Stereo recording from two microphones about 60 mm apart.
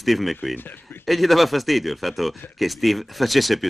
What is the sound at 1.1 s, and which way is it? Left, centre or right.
A man's voice, centre.